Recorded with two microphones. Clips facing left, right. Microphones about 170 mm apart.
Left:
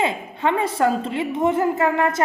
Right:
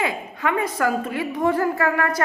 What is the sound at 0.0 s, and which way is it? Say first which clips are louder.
A woman's voice: left 3 dB; 25° left (ahead or behind).